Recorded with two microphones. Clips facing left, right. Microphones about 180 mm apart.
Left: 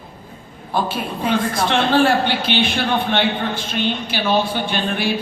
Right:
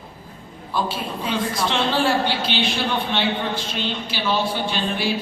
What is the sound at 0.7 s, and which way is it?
A woman's voice, 55° left (ahead or behind).